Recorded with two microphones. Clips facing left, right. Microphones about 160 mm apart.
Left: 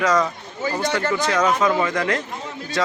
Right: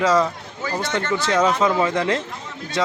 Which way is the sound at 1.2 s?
25° right (ahead or behind).